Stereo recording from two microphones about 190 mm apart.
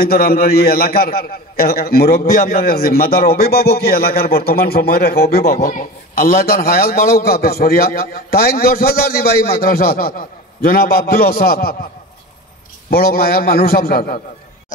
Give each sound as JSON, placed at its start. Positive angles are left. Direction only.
{"t": 0.0, "sound": "a man's voice", "side_deg": 55}
{"t": 12.9, "sound": "a man's voice", "side_deg": 50}